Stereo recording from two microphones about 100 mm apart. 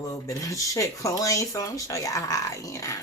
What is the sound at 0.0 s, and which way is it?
Speech, 35° left (ahead or behind).